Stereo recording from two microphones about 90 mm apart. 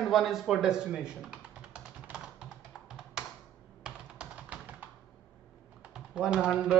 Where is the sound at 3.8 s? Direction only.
10° right (ahead or behind).